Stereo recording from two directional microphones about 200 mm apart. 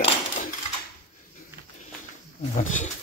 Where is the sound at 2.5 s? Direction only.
40° left (ahead or behind).